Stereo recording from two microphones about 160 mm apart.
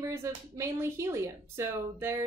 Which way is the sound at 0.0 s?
15° right (ahead or behind).